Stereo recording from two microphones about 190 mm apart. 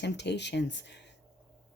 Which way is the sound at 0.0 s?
65° left (ahead or behind).